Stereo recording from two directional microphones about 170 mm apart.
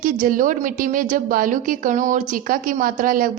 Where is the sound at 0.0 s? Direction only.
55° right (ahead or behind).